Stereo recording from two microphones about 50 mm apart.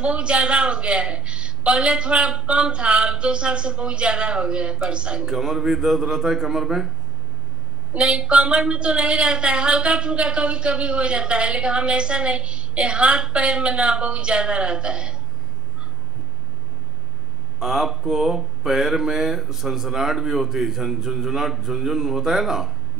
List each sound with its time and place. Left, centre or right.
0.0 s speech: right
5.3 s speech: centre
7.9 s speech: centre
17.6 s speech: centre